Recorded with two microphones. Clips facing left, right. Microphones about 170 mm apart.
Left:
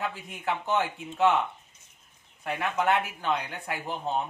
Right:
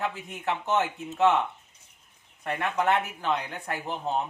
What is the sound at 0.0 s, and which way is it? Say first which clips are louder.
Speech: right 1 dB; centre (ahead or behind).